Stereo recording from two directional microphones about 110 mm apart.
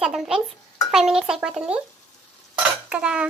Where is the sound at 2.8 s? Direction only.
10° right (ahead or behind).